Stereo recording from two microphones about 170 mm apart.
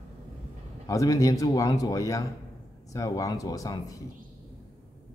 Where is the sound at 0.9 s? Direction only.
20° left (ahead or behind).